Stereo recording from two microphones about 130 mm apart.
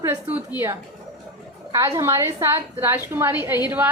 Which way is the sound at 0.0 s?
15° right (ahead or behind).